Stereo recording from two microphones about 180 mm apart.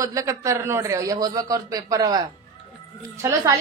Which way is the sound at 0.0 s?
20° right (ahead or behind).